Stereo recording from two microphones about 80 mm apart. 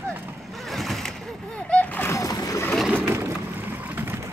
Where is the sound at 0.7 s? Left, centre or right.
Centre.